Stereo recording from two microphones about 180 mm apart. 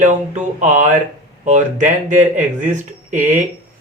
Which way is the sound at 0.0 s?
40° right (ahead or behind).